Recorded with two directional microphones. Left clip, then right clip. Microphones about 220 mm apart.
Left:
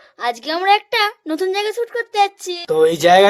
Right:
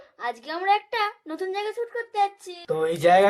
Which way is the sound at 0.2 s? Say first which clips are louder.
Left 9 dB; 45° left (ahead or behind).